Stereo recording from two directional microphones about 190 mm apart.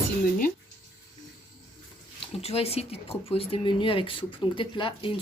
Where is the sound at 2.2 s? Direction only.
30° left (ahead or behind).